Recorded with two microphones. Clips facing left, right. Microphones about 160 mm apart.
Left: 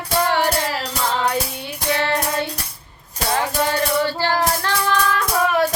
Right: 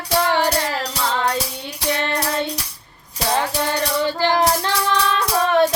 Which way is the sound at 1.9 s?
20° right (ahead or behind).